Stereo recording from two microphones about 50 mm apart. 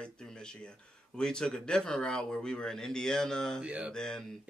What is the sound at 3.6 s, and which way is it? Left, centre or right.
Speech, right.